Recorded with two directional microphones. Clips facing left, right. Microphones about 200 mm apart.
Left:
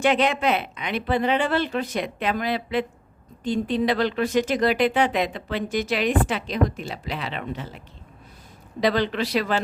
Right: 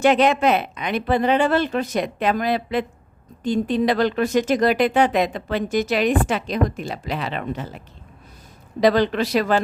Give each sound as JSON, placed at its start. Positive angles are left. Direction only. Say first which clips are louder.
{"t": 0.0, "sound": "speech", "louder": "right 4 dB", "side_deg": -45}
{"t": 8.8, "sound": "speech", "louder": "right 5 dB", "side_deg": -45}